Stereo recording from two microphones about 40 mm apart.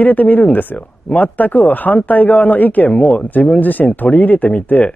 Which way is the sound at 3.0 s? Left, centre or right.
Left.